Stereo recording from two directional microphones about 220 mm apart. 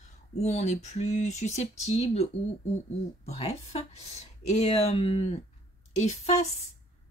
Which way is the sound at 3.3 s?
30° left (ahead or behind).